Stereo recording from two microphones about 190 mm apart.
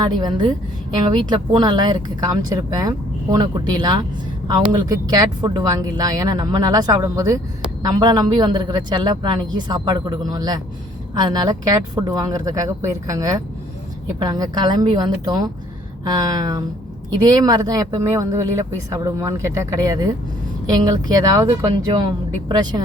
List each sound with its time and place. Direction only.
0.0 s speech: 20° right (ahead or behind)